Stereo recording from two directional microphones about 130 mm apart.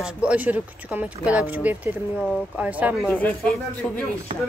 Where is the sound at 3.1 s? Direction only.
10° left (ahead or behind).